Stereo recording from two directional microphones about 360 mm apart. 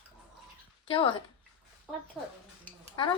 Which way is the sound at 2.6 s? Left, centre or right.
Centre.